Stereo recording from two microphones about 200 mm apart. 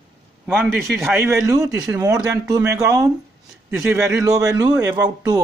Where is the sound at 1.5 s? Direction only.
15° right (ahead or behind).